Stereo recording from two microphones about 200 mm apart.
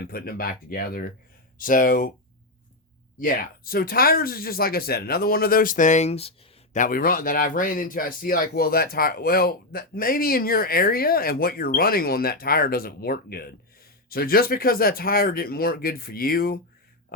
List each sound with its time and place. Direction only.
0.0 s speech: 50° left (ahead or behind)
3.2 s speech: 45° left (ahead or behind)
6.7 s speech: 45° left (ahead or behind)